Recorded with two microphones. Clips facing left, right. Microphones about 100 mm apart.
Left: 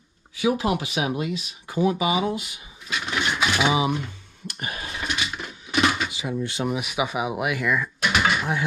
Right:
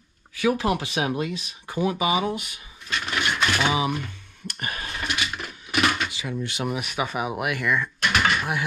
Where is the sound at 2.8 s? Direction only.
5° left (ahead or behind); by 4.1 s 20° left (ahead or behind).